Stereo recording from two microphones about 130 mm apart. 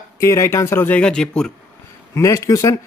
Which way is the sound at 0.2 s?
20° left (ahead or behind).